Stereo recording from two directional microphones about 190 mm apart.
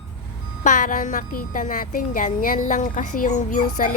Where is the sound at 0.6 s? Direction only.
40° left (ahead or behind).